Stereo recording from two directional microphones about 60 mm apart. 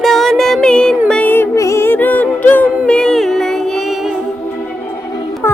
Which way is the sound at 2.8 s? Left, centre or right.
Centre.